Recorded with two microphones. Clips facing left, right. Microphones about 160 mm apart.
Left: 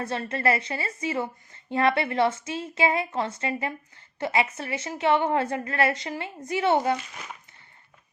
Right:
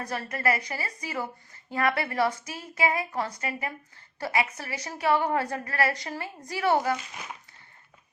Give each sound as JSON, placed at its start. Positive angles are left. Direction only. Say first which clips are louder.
{"t": 0.0, "sound": "a woman's voice", "louder": "left 3 dB", "side_deg": 25}